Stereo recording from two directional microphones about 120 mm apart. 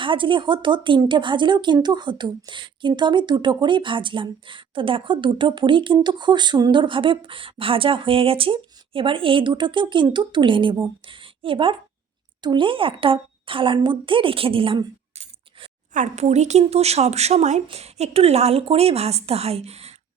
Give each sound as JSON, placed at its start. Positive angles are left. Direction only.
{"t": 0.0, "sound": "a woman's voice", "side_deg": -45}
{"t": 15.2, "sound": "speech", "side_deg": -75}